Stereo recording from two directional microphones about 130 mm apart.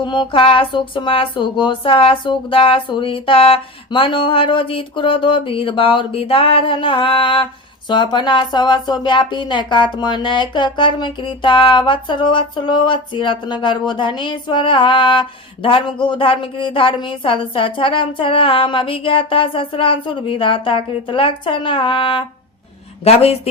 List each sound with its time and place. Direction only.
0.0 s a woman's voice: 40° left (ahead or behind)